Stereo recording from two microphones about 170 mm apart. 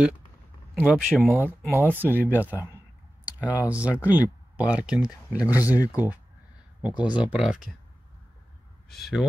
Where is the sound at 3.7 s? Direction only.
10° right (ahead or behind).